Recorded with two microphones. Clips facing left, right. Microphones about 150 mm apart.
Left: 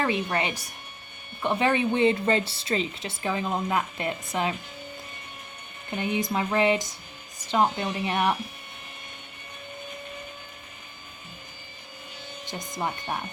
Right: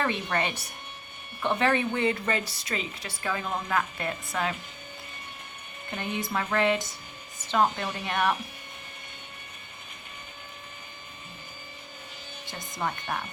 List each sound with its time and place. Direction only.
0.0 s speech: 10° left (ahead or behind)
6.0 s speech: 15° left (ahead or behind)
12.5 s speech: 20° left (ahead or behind)